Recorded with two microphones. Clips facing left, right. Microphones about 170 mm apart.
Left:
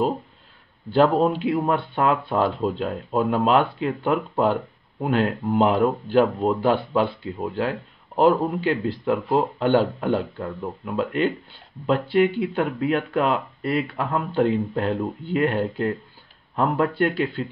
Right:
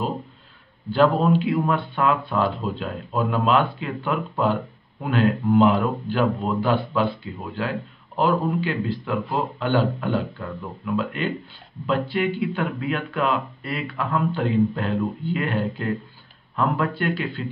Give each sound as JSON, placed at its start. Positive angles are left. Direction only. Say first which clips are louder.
{"t": 0.9, "sound": "speech", "louder": "even", "side_deg": 40}
{"t": 3.4, "sound": "speech", "louder": "left 1 dB", "side_deg": 50}
{"t": 4.0, "sound": "speech", "louder": "left 2 dB", "side_deg": 35}
{"t": 8.2, "sound": "speech", "louder": "left 3 dB", "side_deg": 45}